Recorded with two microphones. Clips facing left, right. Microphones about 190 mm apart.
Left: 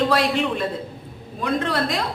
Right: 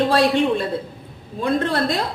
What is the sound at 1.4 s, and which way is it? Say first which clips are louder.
Speech: right 3 dB; 30° right (ahead or behind).